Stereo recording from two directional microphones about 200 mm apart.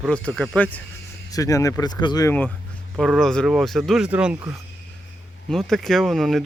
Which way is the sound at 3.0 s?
Centre (ahead or behind).